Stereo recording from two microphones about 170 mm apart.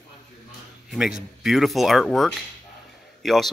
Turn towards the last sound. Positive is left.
turn(degrees=0)  # may be behind; listen again after turning